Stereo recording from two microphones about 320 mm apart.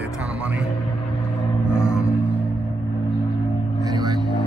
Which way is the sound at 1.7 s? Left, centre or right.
Centre.